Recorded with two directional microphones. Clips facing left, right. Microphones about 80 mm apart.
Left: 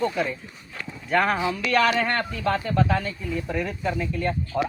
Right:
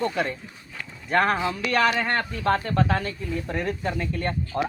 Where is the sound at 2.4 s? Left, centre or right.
Right.